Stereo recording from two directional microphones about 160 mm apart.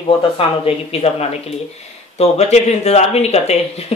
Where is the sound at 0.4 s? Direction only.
40° left (ahead or behind).